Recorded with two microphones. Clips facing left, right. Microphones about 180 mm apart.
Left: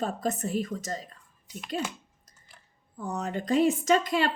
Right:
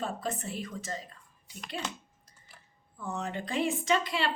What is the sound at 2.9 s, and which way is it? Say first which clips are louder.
A woman's voice: left 3 dB; 40° left (ahead or behind).